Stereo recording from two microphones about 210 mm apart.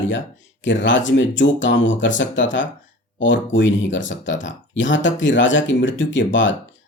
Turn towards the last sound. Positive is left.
turn(degrees=60)  # may be behind; listen again after turning